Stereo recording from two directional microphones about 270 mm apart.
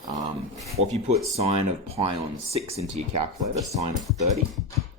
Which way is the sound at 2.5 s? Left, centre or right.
Right.